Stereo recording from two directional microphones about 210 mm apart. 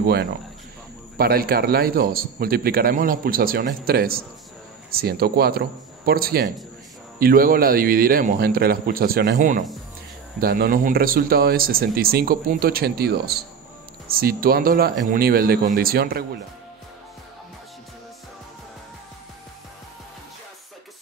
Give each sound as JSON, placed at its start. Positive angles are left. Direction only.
{"t": 0.0, "sound": "a man's voice", "side_deg": -50}
{"t": 9.4, "sound": "a man's voice", "side_deg": -40}